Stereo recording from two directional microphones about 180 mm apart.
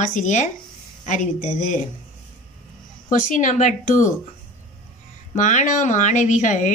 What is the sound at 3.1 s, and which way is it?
Speech, 45° left (ahead or behind).